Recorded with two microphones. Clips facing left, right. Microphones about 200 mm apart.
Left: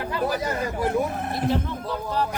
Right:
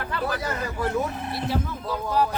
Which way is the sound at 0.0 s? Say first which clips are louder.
Left 3 dB; 15° left (ahead or behind).